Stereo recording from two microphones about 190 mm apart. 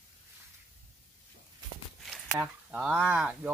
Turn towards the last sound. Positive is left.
turn(degrees=-5)  # may be behind; listen again after turning